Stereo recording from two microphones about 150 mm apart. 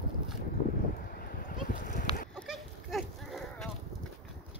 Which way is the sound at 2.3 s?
Centre (ahead or behind).